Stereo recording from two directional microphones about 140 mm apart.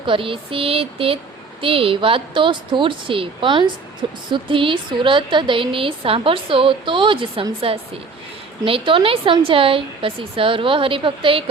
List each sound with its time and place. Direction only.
0.0 s a woman's voice: 40° right (ahead or behind)